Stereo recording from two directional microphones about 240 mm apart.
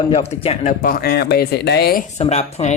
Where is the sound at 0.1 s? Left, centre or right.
Left.